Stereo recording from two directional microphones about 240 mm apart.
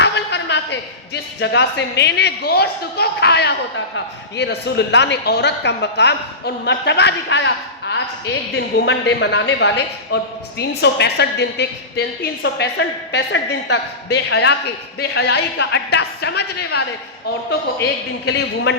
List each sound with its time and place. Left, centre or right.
0.0 s a woman's voice: left
18.3 s a man's voice: left